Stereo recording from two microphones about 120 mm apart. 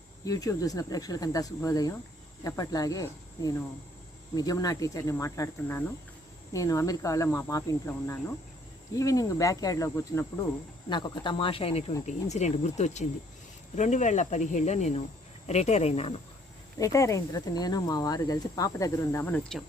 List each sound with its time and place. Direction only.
0.3 s speech: 30° left (ahead or behind)
10.8 s speech: 40° left (ahead or behind)
12.0 s speech: 70° left (ahead or behind)
13.7 s speech: 85° left; by 16.1 s 60° left (ahead or behind)
16.7 s speech: 25° left (ahead or behind)
19.5 s speech: 5° left (ahead or behind)